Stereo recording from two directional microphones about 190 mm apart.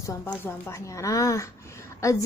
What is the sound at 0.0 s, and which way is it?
Speech, 15° left (ahead or behind).